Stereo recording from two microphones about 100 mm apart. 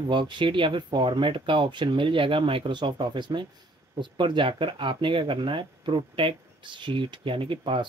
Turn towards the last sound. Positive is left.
turn(degrees=-55)  # may be behind; listen again after turning